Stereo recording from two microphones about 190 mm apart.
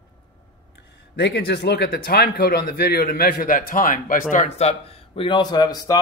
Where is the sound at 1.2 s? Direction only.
65° left (ahead or behind); by 4.7 s 40° left (ahead or behind).